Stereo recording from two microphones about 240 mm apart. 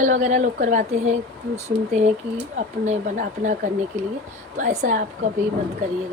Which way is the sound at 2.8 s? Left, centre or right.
Right.